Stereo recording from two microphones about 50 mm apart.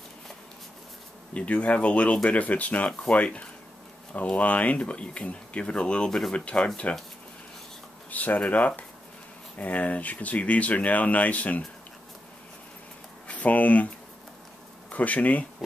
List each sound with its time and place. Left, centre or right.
1.3 s speech: left
4.1 s speech: left
8.1 s speech: left
13.3 s speech: left
14.9 s speech: left